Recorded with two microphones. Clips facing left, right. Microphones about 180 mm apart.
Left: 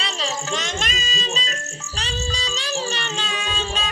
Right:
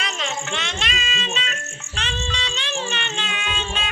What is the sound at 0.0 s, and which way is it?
Insect, 35° left (ahead or behind).